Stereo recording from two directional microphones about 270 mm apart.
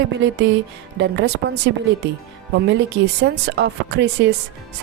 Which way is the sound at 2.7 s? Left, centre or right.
Right.